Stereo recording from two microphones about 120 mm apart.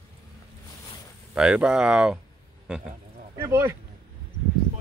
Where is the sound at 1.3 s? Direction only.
10° right (ahead or behind).